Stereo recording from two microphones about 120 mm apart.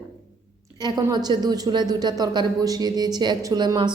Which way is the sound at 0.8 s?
35° right (ahead or behind).